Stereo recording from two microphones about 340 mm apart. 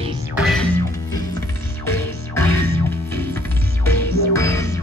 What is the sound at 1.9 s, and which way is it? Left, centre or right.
Music, centre.